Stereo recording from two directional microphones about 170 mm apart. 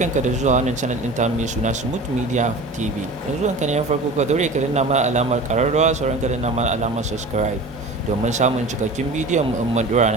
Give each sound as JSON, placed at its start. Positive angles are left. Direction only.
{"t": 0.0, "sound": "speech", "side_deg": -45}
{"t": 8.2, "sound": "speech", "side_deg": -45}